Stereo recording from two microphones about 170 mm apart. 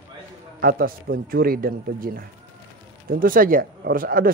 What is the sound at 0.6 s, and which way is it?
Speech, 60° right (ahead or behind).